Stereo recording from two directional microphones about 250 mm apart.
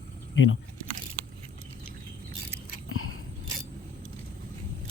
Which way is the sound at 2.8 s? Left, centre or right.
Left.